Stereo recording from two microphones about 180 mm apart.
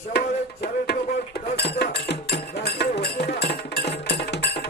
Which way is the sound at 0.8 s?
55° left (ahead or behind).